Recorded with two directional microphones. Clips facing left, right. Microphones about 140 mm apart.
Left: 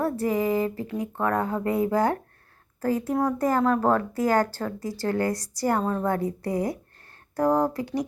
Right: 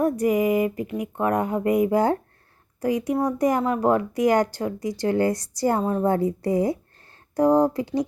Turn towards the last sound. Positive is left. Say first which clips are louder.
# right 4 dB
turn(degrees=-25)  # may be behind; listen again after turning